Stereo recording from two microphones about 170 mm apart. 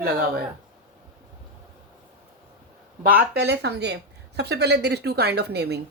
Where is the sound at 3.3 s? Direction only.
75° right (ahead or behind).